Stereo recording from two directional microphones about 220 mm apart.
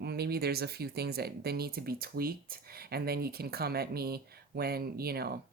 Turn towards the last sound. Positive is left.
turn(degrees=-45)  # may be behind; listen again after turning